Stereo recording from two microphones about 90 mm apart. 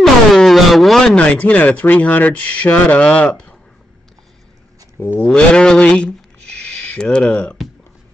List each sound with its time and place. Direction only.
0.0 s speech: centre (ahead or behind)
5.0 s speech: 20° left (ahead or behind)
5.3 s speech: 10° left (ahead or behind)